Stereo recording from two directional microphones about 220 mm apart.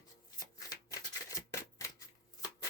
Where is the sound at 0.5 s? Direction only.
15° left (ahead or behind).